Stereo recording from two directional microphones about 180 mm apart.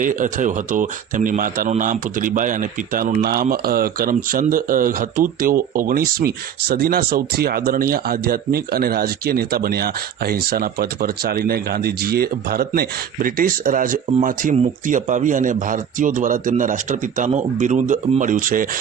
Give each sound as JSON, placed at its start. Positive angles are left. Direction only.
{"t": 0.0, "sound": "speech", "side_deg": -45}